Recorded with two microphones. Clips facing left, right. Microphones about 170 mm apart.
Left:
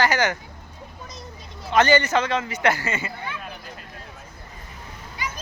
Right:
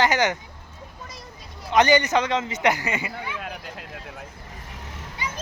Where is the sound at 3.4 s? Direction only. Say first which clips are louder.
Right 3 dB; 85° right.